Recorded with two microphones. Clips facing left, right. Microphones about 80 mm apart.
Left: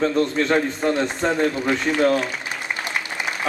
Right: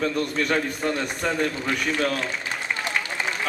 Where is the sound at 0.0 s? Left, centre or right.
Left.